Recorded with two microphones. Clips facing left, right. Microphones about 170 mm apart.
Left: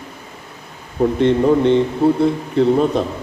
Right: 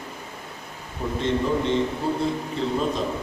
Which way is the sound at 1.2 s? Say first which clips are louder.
Left 9 dB; 60° left (ahead or behind).